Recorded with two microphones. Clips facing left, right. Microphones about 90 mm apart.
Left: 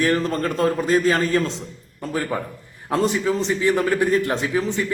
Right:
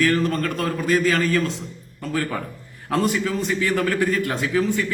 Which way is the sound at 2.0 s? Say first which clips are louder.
Left 1 dB; 20° left (ahead or behind).